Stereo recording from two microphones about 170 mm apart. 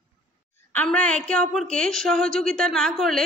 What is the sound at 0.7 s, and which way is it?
A woman's voice, 10° left (ahead or behind).